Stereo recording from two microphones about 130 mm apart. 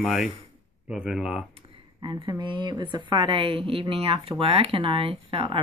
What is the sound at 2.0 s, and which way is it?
A woman's voice, 30° right (ahead or behind).